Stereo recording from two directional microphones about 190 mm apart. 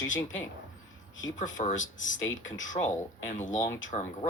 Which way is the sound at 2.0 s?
90° left.